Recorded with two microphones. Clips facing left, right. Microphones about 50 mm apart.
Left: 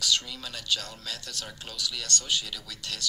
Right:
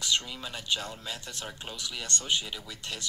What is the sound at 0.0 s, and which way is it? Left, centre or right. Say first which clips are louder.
Speech: left 1 dB; right.